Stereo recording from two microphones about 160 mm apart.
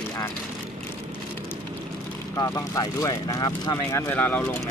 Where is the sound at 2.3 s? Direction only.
20° left (ahead or behind).